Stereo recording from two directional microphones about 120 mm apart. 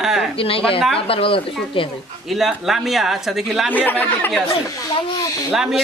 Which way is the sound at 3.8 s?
15° left (ahead or behind).